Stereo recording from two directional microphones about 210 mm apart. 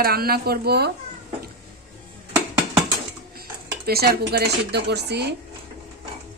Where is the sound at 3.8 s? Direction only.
50° right (ahead or behind).